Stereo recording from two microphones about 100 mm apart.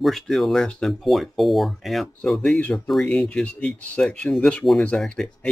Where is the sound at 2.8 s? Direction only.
5° left (ahead or behind).